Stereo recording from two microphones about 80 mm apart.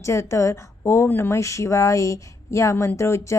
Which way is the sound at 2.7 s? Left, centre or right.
Left.